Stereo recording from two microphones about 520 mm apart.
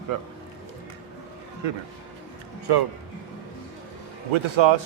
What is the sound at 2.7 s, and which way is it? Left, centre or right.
Speech, right.